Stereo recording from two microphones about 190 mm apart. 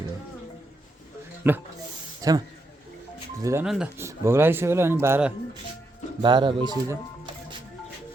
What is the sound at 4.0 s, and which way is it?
Speech, 15° right (ahead or behind).